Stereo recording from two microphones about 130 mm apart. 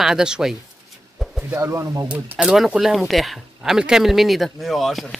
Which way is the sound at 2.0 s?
10° right (ahead or behind).